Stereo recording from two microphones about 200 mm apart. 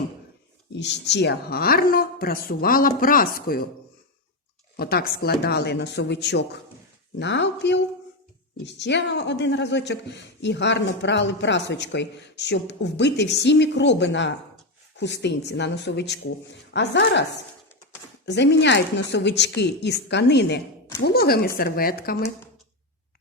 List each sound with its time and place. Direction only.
0.7 s speech: 60° left (ahead or behind)
4.8 s speech: 50° left (ahead or behind)